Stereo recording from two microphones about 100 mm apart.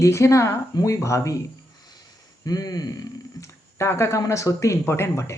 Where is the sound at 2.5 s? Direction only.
40° left (ahead or behind).